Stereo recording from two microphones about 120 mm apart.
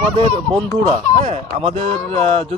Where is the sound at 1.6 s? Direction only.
50° right (ahead or behind).